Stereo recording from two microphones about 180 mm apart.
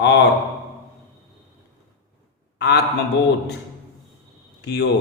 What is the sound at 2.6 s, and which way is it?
Speech, 65° left (ahead or behind).